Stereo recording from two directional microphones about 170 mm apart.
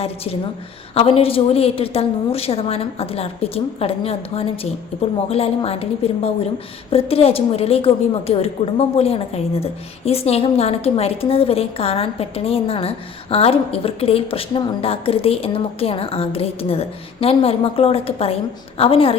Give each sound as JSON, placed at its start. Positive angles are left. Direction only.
{"t": 0.9, "sound": "a woman's voice", "side_deg": 35}